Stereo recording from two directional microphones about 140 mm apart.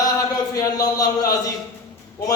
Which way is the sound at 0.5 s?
25° left (ahead or behind).